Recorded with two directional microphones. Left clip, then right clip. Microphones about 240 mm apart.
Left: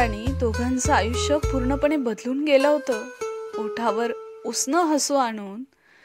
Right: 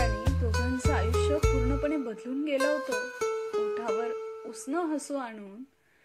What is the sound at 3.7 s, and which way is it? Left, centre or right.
Speech, left.